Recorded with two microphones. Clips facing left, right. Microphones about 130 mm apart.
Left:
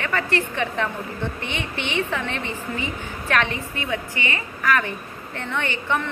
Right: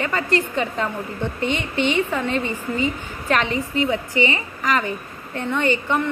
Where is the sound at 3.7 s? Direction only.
15° right (ahead or behind).